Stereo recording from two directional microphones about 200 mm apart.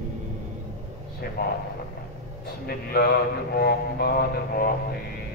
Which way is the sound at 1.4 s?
50° left (ahead or behind).